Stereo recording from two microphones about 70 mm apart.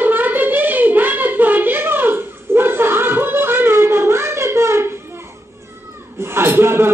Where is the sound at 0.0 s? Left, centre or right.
Right.